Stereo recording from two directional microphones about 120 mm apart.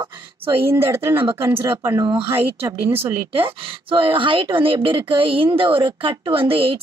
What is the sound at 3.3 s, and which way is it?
Speech, 45° right (ahead or behind).